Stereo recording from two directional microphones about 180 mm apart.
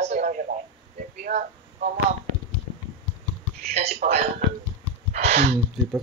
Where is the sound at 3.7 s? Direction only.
35° right (ahead or behind).